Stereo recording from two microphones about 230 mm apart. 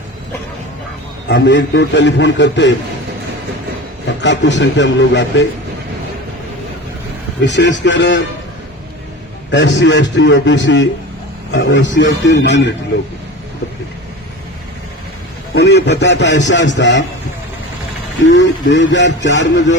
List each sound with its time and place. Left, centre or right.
1.3 s speech: left
4.2 s speech: left
7.4 s speech: left
9.5 s speech: left
15.5 s speech: left
18.2 s speech: left